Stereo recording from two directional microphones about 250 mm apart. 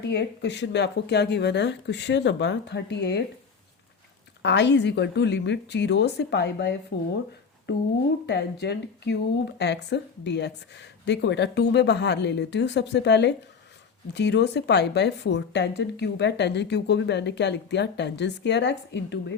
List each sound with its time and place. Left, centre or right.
0.1 s speech: left
4.4 s speech: left